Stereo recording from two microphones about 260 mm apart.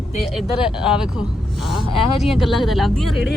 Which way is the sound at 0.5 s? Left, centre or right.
Centre.